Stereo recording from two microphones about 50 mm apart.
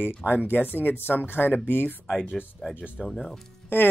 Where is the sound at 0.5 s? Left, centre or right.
Left.